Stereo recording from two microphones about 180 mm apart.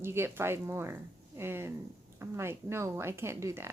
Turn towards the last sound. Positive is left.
turn(degrees=-15)  # may be behind; listen again after turning